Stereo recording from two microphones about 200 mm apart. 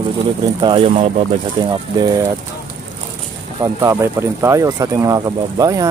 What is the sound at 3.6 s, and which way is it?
Speech, 15° right (ahead or behind).